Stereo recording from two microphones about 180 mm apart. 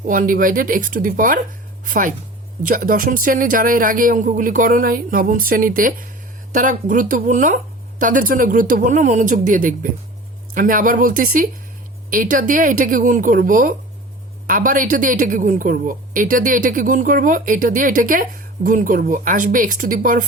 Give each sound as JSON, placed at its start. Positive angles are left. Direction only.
{"t": 0.1, "sound": "speech", "side_deg": -50}